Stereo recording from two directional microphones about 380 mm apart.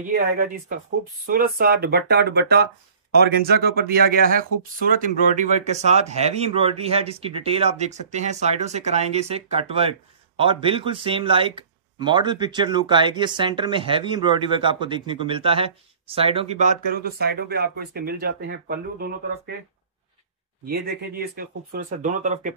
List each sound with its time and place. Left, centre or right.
0.1 s speech: right
20.6 s speech: right